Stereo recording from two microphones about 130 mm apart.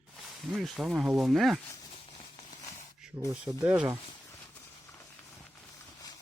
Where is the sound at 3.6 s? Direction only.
10° right (ahead or behind).